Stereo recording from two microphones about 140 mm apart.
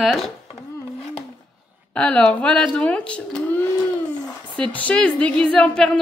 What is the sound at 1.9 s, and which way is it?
A woman's voice, 10° left (ahead or behind).